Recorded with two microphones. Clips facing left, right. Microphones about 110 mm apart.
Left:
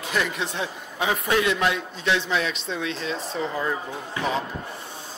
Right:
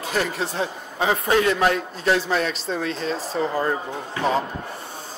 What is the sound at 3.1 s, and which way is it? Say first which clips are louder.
Speech: right 3 dB; centre (ahead or behind).